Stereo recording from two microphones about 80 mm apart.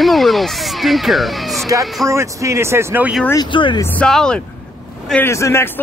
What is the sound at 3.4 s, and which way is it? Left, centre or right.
Speech, left.